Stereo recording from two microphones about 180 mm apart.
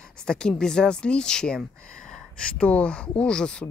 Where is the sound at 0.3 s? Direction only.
5° left (ahead or behind).